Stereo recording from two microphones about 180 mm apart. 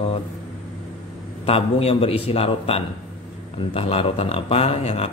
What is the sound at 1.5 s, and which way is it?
Speech, 35° left (ahead or behind).